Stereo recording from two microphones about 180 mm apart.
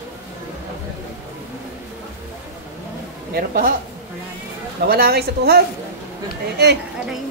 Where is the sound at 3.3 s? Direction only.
50° right (ahead or behind).